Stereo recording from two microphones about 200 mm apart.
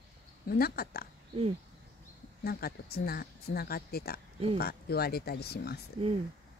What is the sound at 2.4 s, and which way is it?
Speech, 50° left (ahead or behind).